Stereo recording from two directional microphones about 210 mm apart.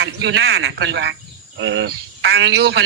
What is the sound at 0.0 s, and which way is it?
Speech, 55° right (ahead or behind).